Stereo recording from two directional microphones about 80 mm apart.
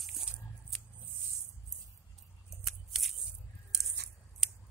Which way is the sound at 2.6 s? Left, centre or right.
Centre.